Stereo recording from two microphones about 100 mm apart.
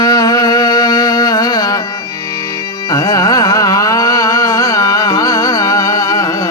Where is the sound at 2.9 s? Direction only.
35° left (ahead or behind).